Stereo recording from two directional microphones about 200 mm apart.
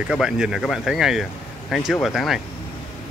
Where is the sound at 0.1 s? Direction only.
5° right (ahead or behind).